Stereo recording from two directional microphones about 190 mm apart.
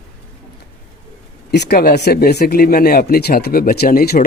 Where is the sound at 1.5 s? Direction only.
60° left (ahead or behind).